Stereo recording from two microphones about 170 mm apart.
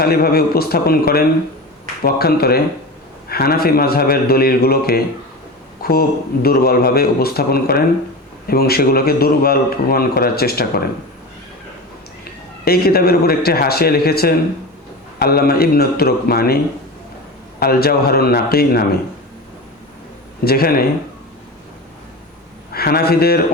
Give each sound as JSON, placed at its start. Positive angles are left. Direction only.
{"t": 0.0, "sound": "a man's voice", "side_deg": 65}
{"t": 12.6, "sound": "a man's voice", "side_deg": 65}
{"t": 17.6, "sound": "a man's voice", "side_deg": 65}
{"t": 20.4, "sound": "a man's voice", "side_deg": 65}
{"t": 22.7, "sound": "a man's voice", "side_deg": 65}